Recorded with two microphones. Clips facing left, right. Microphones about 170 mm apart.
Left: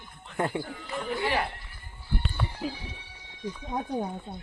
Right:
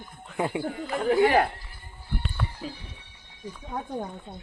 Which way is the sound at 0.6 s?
60° right (ahead or behind).